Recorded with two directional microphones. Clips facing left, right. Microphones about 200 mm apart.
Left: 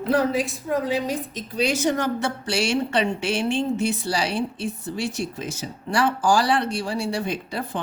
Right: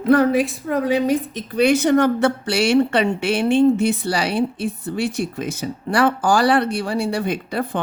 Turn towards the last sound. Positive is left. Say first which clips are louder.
# right 5 dB
turn(degrees=-55)  # may be behind; listen again after turning